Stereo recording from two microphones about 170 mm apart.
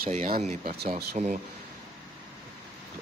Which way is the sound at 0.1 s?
45° right (ahead or behind).